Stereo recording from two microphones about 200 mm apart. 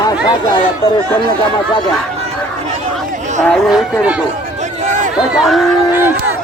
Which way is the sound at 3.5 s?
Centre (ahead or behind).